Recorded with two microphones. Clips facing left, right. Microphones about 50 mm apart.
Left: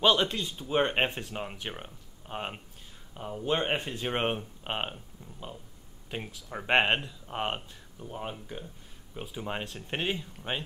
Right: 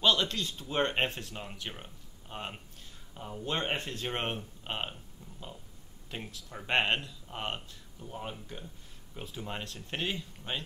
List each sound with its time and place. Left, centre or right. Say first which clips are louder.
0.0 s speech: left 3 dB; centre
6.0 s speech: left 4 dB; centre